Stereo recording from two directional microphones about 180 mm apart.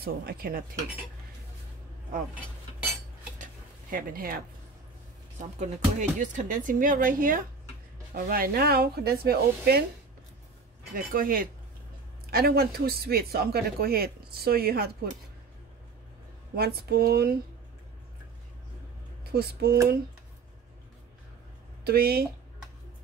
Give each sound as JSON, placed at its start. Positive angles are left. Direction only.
{"t": 0.0, "sound": "speech", "side_deg": -60}
{"t": 3.9, "sound": "speech", "side_deg": -55}
{"t": 5.4, "sound": "speech", "side_deg": -40}
{"t": 11.1, "sound": "speech", "side_deg": -50}
{"t": 16.5, "sound": "speech", "side_deg": -60}
{"t": 19.3, "sound": "speech", "side_deg": -60}
{"t": 21.8, "sound": "speech", "side_deg": -60}